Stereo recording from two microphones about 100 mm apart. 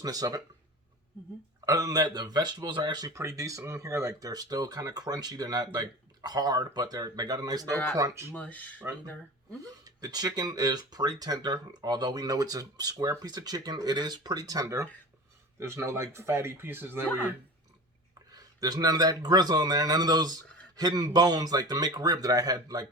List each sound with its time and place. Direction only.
0.0 s speech: 40° right (ahead or behind)
1.6 s speech: 35° right (ahead or behind)
3.1 s speech: 30° right (ahead or behind)
7.7 s speech: 20° left (ahead or behind)
7.9 s speech: 30° right (ahead or behind)
8.3 s speech: 15° left (ahead or behind)
9.8 s speech: 40° right (ahead or behind); by 17.1 s 20° right (ahead or behind)
18.3 s speech: 40° right (ahead or behind)